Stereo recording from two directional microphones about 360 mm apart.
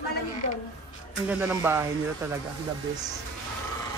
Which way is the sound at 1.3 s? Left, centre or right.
Centre.